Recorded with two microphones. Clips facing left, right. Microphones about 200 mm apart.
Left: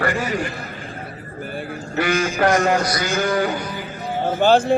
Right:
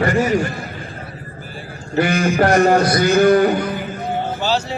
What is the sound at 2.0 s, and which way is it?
Speech, 60° right (ahead or behind).